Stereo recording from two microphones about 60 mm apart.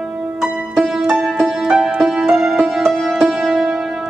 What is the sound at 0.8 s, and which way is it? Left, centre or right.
Music, centre.